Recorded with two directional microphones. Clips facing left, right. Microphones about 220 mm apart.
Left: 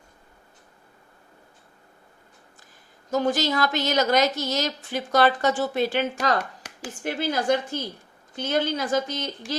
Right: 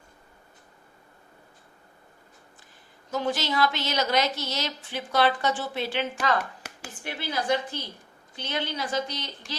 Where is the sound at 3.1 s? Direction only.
45° left (ahead or behind).